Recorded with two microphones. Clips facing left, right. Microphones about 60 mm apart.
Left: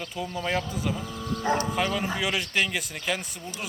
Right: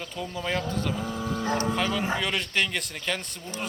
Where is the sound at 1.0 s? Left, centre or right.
Right.